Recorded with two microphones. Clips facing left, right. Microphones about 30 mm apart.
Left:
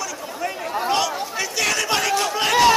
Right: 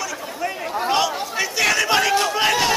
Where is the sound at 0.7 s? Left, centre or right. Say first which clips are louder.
Right 1 dB; centre.